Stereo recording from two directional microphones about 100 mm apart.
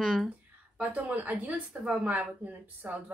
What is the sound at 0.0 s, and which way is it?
Speech, 5° right (ahead or behind).